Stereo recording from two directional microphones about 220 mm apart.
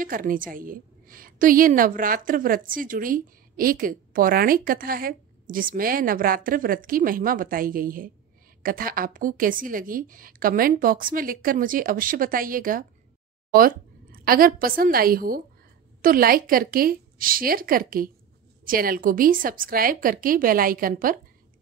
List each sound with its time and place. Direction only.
0.0 s a woman's voice: 40° right (ahead or behind)